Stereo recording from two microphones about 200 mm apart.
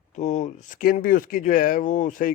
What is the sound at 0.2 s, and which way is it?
Speech, 35° left (ahead or behind).